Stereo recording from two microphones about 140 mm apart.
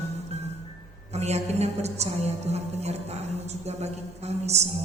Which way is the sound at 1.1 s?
50° right (ahead or behind).